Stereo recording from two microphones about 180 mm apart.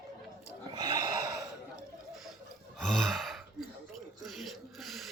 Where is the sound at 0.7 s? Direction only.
20° right (ahead or behind).